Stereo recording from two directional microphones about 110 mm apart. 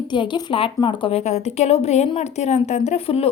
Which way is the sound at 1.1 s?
85° left.